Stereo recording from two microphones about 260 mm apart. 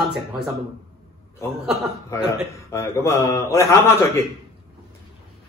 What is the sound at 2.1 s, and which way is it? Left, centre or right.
Speech, centre.